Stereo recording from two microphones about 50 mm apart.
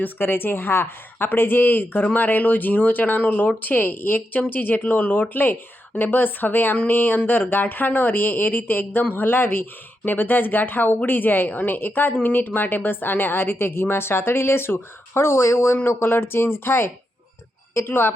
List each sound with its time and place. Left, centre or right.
0.0 s a woman's voice: left